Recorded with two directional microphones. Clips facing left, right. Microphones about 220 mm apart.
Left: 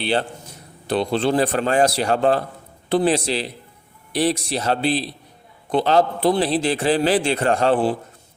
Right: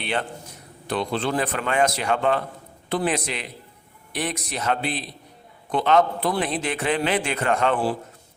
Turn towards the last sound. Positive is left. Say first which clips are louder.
# left 4 dB
turn(degrees=30)  # may be behind; listen again after turning